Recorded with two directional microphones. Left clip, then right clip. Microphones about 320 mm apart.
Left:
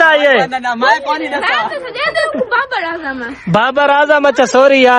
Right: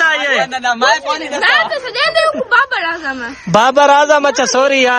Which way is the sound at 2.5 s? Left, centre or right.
Centre.